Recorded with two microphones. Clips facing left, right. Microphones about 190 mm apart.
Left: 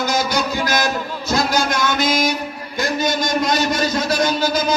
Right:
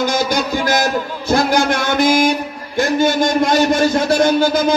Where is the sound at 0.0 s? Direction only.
50° right (ahead or behind).